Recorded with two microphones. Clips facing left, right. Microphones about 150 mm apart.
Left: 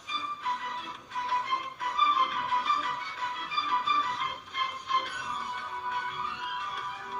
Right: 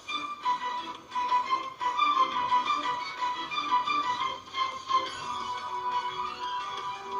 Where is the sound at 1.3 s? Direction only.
35° right (ahead or behind).